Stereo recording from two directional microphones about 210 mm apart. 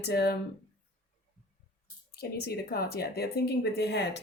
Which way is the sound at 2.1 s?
50° left (ahead or behind).